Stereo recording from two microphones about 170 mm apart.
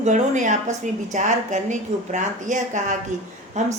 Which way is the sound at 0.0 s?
45° right (ahead or behind).